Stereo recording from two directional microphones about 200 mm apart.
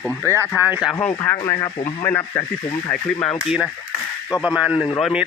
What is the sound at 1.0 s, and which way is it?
Speech, 10° left (ahead or behind).